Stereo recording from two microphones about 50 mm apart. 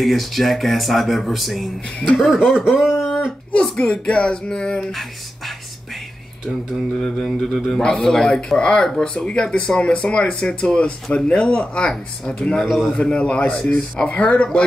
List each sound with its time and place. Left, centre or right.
0.0 s speech: centre
2.4 s speech: centre
3.7 s speech: left
6.9 s speech: centre
12.6 s speech: centre
13.0 s speech: left